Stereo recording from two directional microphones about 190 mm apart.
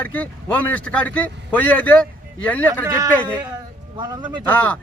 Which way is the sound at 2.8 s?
15° right (ahead or behind).